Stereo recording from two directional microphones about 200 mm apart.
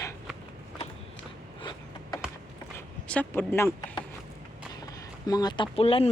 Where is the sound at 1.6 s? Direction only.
25° left (ahead or behind).